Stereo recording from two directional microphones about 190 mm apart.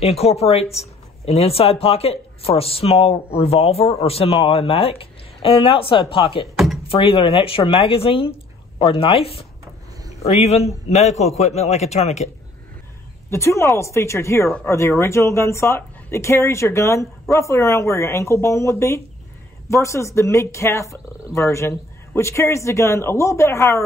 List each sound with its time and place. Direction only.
0.0 s speech: 30° left (ahead or behind)
13.3 s speech: 15° left (ahead or behind)